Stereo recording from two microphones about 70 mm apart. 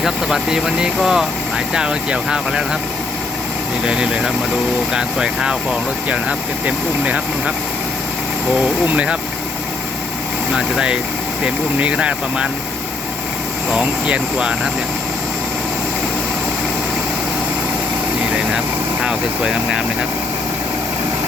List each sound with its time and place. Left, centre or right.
0.0 s speech: centre
3.8 s speech: centre
8.9 s speech: centre
10.5 s speech: centre
13.7 s speech: centre
19.0 s speech: centre